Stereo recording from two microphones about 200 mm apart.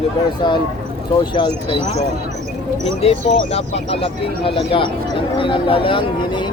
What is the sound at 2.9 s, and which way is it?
Speech, 30° left (ahead or behind).